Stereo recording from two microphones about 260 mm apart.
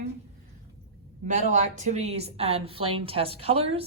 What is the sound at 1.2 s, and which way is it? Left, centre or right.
Speech, right.